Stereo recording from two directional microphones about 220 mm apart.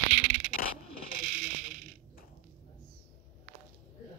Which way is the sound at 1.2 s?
5° right (ahead or behind).